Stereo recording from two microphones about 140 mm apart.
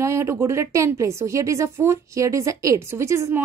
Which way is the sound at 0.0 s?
20° right (ahead or behind).